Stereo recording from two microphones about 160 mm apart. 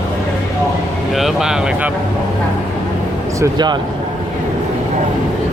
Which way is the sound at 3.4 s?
25° right (ahead or behind).